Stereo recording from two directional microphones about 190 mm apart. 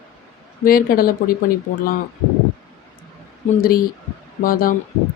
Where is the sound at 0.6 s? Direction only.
50° left (ahead or behind).